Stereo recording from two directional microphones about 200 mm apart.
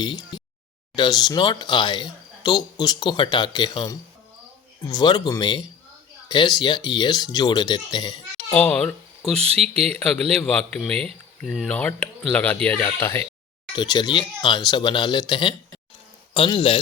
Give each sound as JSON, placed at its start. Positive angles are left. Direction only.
{"t": 0.0, "sound": "a sound", "side_deg": 20}
{"t": 0.9, "sound": "speech", "side_deg": 20}
{"t": 8.5, "sound": "speech", "side_deg": 5}